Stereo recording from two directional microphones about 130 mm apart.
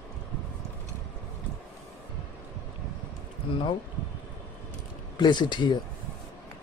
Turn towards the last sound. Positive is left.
turn(degrees=35)  # may be behind; listen again after turning